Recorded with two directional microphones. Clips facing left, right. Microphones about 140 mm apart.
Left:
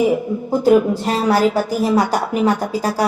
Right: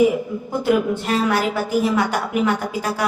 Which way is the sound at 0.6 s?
35° left (ahead or behind).